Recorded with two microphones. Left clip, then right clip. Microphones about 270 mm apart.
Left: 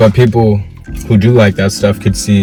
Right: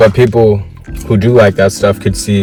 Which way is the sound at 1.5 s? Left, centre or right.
Centre.